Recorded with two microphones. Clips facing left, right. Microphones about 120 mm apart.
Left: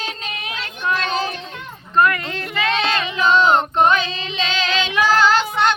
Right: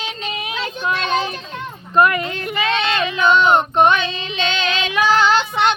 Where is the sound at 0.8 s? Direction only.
20° right (ahead or behind).